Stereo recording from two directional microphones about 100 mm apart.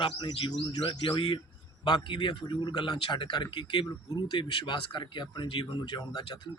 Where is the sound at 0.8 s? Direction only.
60° left (ahead or behind).